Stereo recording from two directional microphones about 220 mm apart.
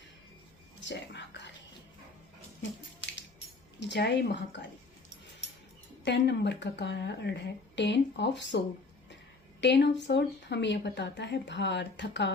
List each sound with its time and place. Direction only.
0.8 s a sound: 55° left (ahead or behind)
3.8 s speech: 50° left (ahead or behind)
6.1 s speech: 50° left (ahead or behind)